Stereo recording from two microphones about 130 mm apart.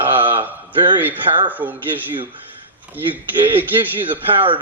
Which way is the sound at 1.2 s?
40° right (ahead or behind).